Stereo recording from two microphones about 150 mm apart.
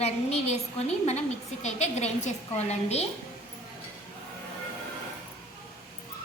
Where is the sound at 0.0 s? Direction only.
45° left (ahead or behind).